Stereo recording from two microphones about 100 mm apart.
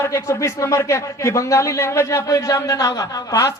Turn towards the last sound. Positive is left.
turn(degrees=35)  # may be behind; listen again after turning